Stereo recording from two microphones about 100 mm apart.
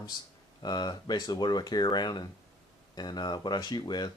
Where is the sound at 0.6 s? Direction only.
45° left (ahead or behind).